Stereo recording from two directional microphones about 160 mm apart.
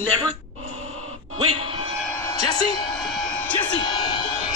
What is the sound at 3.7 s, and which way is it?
Music, 30° left (ahead or behind).